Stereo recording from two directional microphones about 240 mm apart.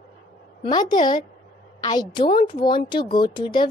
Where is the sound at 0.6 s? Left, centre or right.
Centre.